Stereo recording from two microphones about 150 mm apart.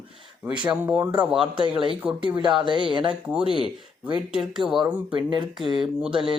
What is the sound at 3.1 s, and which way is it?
Speech, 10° right (ahead or behind).